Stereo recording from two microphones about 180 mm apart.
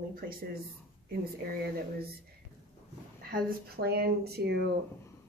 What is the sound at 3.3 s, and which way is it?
Speech, 55° right (ahead or behind).